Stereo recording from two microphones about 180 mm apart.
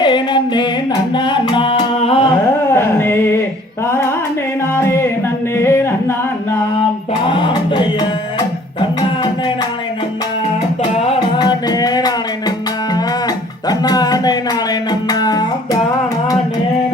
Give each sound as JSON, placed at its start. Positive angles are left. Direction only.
{"t": 0.0, "sound": "music", "side_deg": 25}
{"t": 2.7, "sound": "music", "side_deg": 15}
{"t": 4.7, "sound": "music", "side_deg": 15}
{"t": 5.5, "sound": "singing", "side_deg": 15}
{"t": 7.3, "sound": "music", "side_deg": 25}
{"t": 8.8, "sound": "a sound", "side_deg": 25}
{"t": 10.9, "sound": "music", "side_deg": 35}
{"t": 11.3, "sound": "music", "side_deg": 20}
{"t": 13.7, "sound": "music", "side_deg": 20}